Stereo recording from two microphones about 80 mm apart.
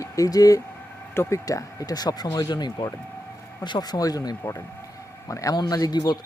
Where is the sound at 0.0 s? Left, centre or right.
Left.